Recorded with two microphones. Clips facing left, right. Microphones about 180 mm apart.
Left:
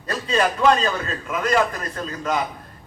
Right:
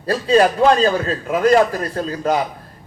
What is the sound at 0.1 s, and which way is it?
A man's voice, 35° right (ahead or behind).